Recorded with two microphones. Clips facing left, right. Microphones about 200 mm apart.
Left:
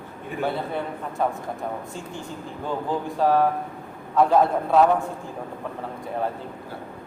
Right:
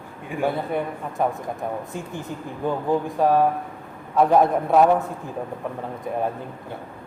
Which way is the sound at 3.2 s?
15° right (ahead or behind).